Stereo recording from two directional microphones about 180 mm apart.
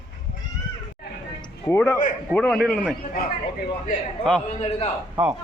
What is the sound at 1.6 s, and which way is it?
A man's voice, 10° left (ahead or behind).